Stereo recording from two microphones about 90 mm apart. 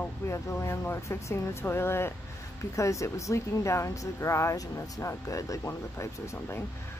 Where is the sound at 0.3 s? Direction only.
35° left (ahead or behind).